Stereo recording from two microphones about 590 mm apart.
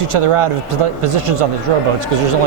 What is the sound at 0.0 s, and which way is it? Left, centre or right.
A man's voice, right.